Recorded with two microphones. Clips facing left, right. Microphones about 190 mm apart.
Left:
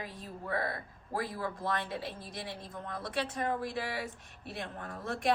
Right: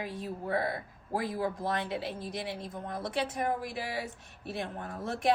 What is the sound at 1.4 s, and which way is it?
A woman's voice, 15° right (ahead or behind).